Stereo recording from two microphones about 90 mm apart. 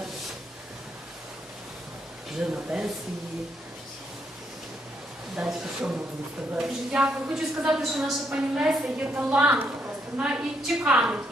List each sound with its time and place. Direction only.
2.4 s a woman's voice: 10° right (ahead or behind)
5.4 s a woman's voice: 5° right (ahead or behind)